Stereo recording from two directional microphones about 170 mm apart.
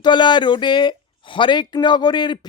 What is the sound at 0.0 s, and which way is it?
Speech, 25° left (ahead or behind).